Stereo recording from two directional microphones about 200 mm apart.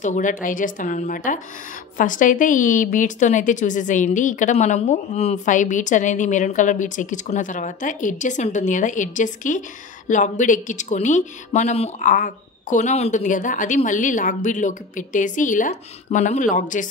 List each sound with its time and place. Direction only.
0.0 s a woman's voice: 40° left (ahead or behind)